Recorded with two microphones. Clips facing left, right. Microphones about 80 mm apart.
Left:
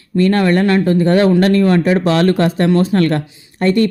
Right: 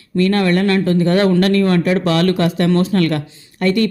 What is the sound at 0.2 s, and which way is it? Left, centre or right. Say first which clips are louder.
Speech: left 2 dB; left.